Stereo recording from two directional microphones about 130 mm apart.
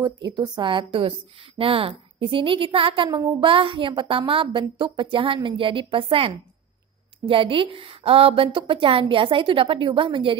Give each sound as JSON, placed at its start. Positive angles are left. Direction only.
{"t": 0.0, "sound": "a woman's voice", "side_deg": -35}